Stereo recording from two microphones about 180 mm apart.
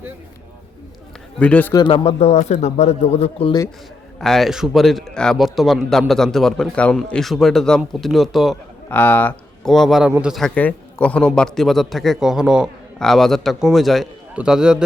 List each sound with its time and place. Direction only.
1.4 s speech: 10° left (ahead or behind)
1.7 s speech: 30° left (ahead or behind)
4.2 s a man's voice: centre (ahead or behind)
8.9 s a man's voice: 10° left (ahead or behind)